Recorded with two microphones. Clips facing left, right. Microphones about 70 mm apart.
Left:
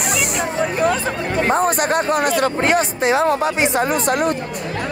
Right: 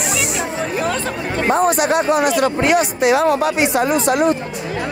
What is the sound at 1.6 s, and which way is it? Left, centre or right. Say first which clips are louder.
A woman's voice: right 2 dB; left.